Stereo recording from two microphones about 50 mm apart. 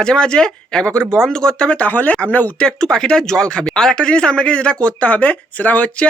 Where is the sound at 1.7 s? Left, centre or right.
Left.